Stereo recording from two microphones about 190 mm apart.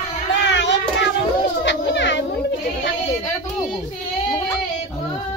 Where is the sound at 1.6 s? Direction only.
70° left (ahead or behind).